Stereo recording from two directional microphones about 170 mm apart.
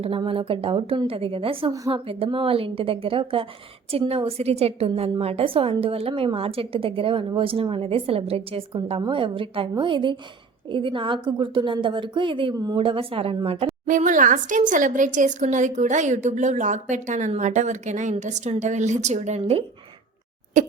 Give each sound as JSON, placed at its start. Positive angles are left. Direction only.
{"t": 0.0, "sound": "a woman's voice", "side_deg": -35}
{"t": 13.8, "sound": "speech", "side_deg": -50}